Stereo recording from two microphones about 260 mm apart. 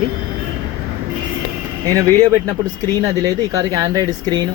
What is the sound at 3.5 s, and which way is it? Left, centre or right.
Speech, centre.